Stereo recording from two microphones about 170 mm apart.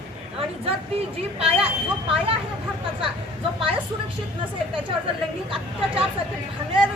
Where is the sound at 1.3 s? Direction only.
35° right (ahead or behind).